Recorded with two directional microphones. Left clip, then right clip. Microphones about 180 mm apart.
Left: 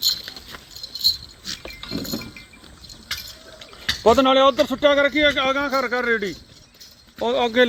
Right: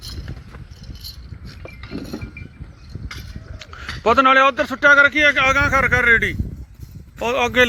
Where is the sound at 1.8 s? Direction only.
35° left (ahead or behind).